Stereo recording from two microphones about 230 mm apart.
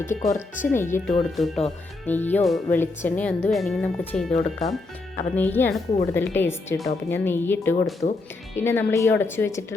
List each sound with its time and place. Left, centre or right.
0.0 s speech: centre
0.3 s speech: left
0.7 s a woman's voice: centre
4.3 s speech: left
5.4 s a woman's voice: centre